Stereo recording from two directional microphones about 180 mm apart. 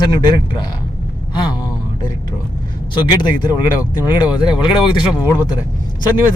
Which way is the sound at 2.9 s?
25° left (ahead or behind).